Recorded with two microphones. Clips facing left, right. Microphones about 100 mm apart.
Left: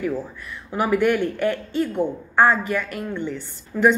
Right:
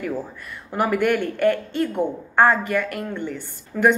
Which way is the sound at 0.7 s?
50° right (ahead or behind).